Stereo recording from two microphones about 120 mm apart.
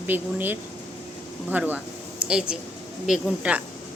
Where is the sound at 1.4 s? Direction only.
15° right (ahead or behind).